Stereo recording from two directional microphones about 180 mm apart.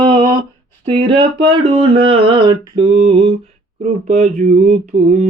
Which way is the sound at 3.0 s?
30° right (ahead or behind).